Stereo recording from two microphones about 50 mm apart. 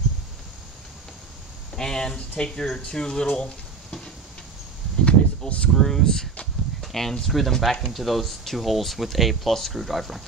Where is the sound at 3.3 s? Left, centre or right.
Centre.